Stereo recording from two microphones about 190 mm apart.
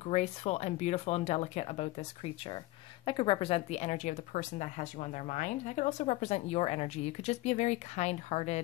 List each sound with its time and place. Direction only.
0.0 s speech: 35° left (ahead or behind)